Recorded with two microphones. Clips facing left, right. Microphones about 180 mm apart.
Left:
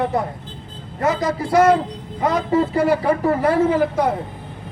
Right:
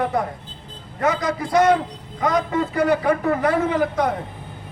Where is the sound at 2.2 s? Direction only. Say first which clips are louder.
Left 3 dB; 30° left (ahead or behind).